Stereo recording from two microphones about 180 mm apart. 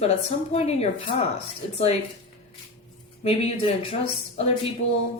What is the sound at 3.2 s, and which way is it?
Speech, 30° left (ahead or behind).